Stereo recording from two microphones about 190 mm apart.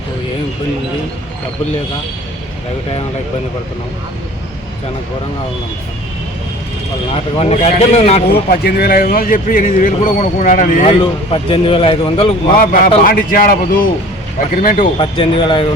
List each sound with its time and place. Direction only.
7.3 s speech: 35° left (ahead or behind)
8.3 s speech: 55° left (ahead or behind)
11.0 s speech: 30° left (ahead or behind)
12.5 s speech: 45° left (ahead or behind)
14.9 s speech: 25° left (ahead or behind)